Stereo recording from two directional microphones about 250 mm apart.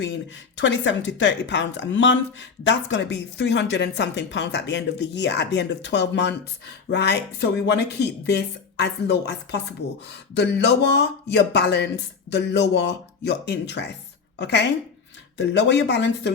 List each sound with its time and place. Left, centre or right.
0.0 s a woman's voice: left